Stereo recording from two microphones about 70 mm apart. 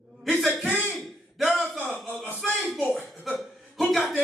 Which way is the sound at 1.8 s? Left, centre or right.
Centre.